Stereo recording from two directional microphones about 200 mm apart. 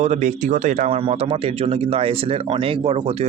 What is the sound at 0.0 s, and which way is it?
Speech, 35° right (ahead or behind).